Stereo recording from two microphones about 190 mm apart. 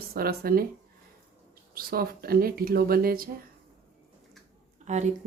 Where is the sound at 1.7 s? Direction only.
50° right (ahead or behind).